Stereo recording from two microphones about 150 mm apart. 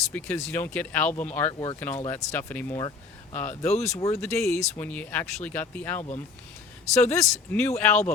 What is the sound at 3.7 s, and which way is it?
Speech, 50° left (ahead or behind).